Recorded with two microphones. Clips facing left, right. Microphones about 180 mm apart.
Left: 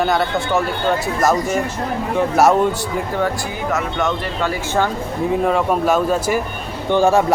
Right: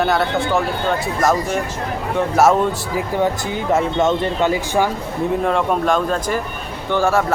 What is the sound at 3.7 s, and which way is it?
Speech, 25° right (ahead or behind).